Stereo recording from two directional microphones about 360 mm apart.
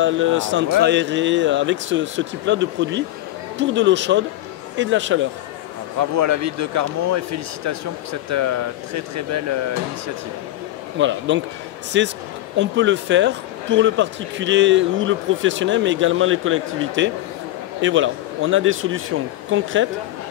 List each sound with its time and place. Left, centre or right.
0.0 s a man's voice: right
5.9 s speech: right
11.0 s a man's voice: right